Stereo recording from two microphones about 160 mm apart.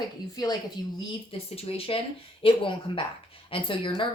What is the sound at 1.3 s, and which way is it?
Speech, 40° left (ahead or behind).